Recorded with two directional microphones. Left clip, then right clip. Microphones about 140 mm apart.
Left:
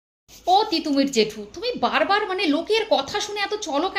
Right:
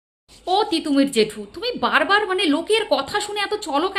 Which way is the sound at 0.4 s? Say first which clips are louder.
Left 1 dB; 20° right (ahead or behind).